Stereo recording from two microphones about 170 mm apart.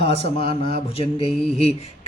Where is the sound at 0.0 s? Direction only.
35° left (ahead or behind).